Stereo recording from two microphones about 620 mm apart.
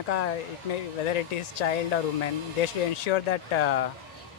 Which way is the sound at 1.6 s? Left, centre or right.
Left.